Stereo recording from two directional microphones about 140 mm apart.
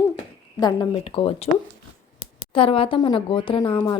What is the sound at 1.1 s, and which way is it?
Speech, 40° left (ahead or behind).